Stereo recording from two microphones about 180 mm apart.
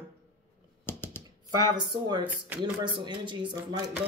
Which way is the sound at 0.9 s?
10° left (ahead or behind).